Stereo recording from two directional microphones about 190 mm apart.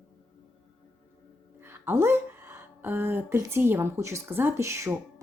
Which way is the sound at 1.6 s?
10° right (ahead or behind).